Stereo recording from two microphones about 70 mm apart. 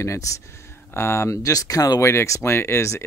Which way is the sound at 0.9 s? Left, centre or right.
Left.